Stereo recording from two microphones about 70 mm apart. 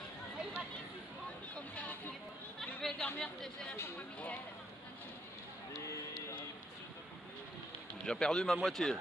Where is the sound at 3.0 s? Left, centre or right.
Left.